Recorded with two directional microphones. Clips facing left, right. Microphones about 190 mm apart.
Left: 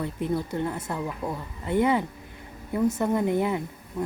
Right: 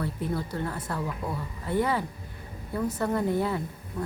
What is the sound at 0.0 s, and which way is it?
Speech, 20° left (ahead or behind).